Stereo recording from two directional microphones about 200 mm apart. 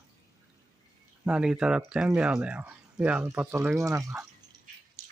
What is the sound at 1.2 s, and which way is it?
Speech, 5° right (ahead or behind).